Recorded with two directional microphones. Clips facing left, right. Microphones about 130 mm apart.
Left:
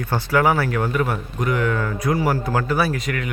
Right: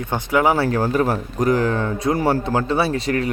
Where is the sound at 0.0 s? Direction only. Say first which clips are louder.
Right 1 dB; 20° right (ahead or behind).